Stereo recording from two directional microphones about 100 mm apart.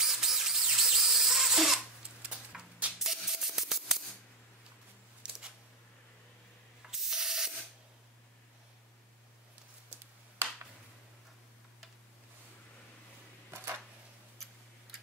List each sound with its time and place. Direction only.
0.0 s drill: 5° right (ahead or behind)
2.2 s music: 10° right (ahead or behind)
5.2 s a sound: 10° right (ahead or behind)
6.9 s sanding: 5° right (ahead or behind)